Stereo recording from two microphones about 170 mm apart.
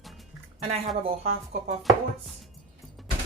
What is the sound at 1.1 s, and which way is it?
Speech, 40° right (ahead or behind).